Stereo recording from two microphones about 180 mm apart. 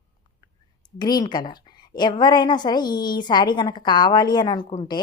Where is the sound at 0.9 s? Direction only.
20° left (ahead or behind).